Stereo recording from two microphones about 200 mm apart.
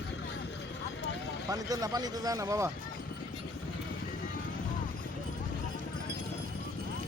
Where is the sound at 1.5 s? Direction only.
20° right (ahead or behind).